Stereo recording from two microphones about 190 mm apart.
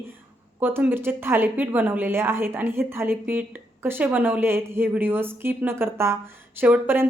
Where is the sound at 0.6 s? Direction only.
10° right (ahead or behind).